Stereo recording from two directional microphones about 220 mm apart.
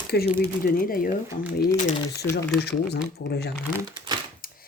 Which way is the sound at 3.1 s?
45° left (ahead or behind).